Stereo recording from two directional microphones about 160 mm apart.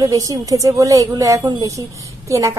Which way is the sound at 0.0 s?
20° right (ahead or behind).